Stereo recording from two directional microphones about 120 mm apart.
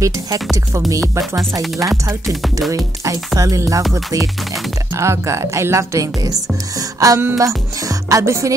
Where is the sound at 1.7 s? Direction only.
30° right (ahead or behind).